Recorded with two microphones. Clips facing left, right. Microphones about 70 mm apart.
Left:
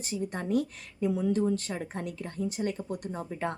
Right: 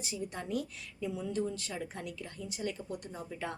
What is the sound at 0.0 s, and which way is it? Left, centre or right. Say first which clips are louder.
Speech: left 6 dB; left.